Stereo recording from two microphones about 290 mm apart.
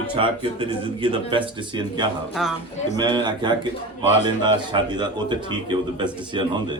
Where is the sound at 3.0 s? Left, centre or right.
Centre.